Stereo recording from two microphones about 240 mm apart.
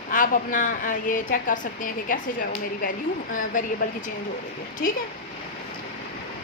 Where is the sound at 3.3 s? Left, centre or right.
Left.